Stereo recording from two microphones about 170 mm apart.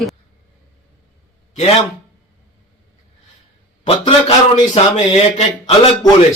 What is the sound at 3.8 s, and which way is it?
Speech, 35° left (ahead or behind).